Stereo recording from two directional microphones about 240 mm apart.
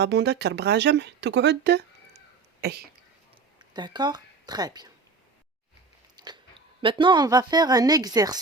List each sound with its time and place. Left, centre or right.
0.0 s speech: right
3.8 s speech: centre
6.1 s biting: centre
6.8 s speech: right